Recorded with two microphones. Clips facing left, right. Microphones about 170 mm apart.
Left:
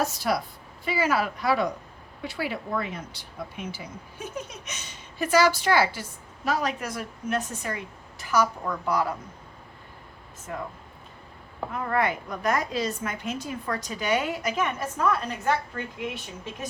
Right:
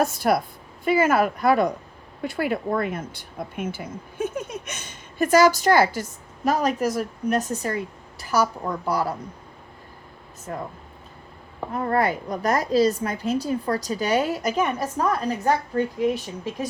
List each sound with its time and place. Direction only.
0.0 s a woman's voice: 50° right (ahead or behind); by 9.1 s 35° right (ahead or behind)
10.5 s a woman's voice: 35° right (ahead or behind)
11.7 s a woman's voice: 35° right (ahead or behind)